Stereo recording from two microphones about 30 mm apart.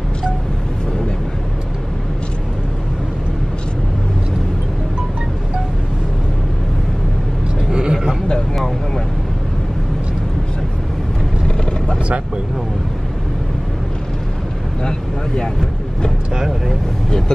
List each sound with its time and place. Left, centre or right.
7.7 s a sound: right
14.8 s vehicle: left
16.3 s vehicle: centre